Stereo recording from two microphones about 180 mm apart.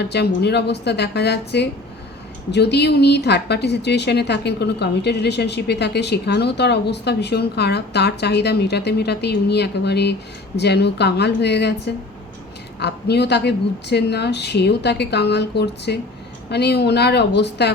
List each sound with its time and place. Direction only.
0.0 s a woman's voice: 65° left (ahead or behind)
12.8 s a woman's voice: 65° left (ahead or behind)